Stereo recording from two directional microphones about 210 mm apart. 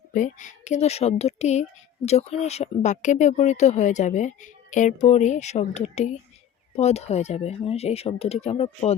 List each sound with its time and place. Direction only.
0.1 s speech: 35° left (ahead or behind)